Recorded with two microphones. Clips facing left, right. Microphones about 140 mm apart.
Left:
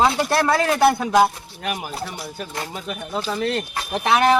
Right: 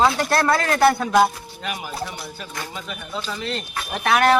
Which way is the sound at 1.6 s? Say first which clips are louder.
Left 2 dB; 55° left (ahead or behind).